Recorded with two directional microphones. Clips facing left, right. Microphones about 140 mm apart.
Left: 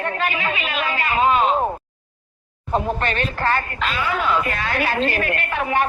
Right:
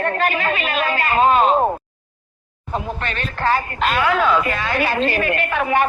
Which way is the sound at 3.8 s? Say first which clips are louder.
Right 5 dB; 45° right (ahead or behind).